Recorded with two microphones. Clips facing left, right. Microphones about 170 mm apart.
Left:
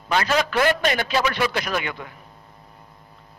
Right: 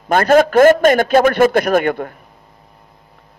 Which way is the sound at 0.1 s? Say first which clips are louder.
Right 10 dB; 50° right (ahead or behind).